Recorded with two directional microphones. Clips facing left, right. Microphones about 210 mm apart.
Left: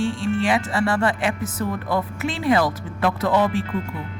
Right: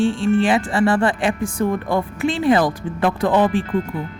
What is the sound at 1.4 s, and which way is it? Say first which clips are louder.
Music: right 4 dB; 50° right (ahead or behind).